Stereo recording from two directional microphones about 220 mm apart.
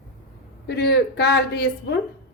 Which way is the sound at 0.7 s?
50° left (ahead or behind).